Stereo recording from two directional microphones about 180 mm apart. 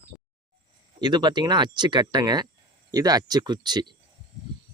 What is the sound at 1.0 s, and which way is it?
Speech, 25° right (ahead or behind).